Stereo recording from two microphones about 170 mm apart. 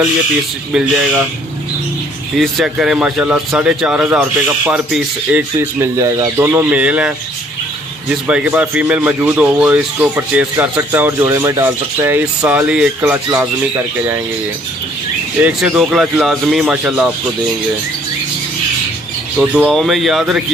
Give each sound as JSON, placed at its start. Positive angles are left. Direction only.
{"t": 0.7, "sound": "speech", "side_deg": -5}
{"t": 2.3, "sound": "speech", "side_deg": 0}
{"t": 15.4, "sound": "speech", "side_deg": -5}
{"t": 19.5, "sound": "speech", "side_deg": 0}